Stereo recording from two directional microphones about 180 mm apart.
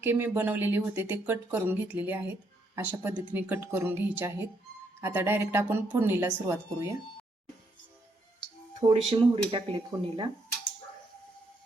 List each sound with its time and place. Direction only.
0.0 s speech: 10° right (ahead or behind)
8.8 s speech: 30° right (ahead or behind)